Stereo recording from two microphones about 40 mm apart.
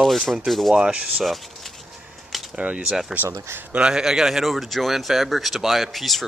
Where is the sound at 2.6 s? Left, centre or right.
Right.